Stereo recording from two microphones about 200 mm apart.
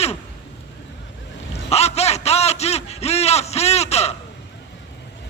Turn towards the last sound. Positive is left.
turn(degrees=30)  # may be behind; listen again after turning